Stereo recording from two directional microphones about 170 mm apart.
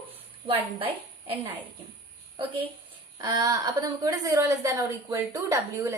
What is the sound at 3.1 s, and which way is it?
A woman's voice, 25° right (ahead or behind).